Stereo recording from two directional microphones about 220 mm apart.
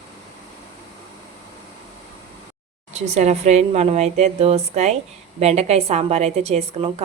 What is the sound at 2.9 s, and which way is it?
A woman's voice, 30° right (ahead or behind).